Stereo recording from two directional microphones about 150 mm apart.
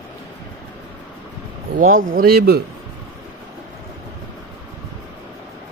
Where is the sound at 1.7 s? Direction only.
75° right (ahead or behind).